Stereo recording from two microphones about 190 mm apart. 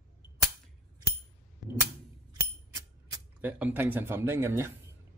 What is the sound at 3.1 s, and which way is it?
Speech, 10° right (ahead or behind).